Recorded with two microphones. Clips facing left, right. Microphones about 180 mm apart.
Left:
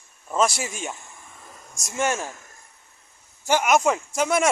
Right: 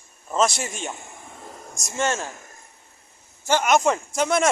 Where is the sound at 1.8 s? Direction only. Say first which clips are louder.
Even; 10° left (ahead or behind).